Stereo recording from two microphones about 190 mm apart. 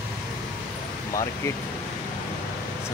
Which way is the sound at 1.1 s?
15° left (ahead or behind).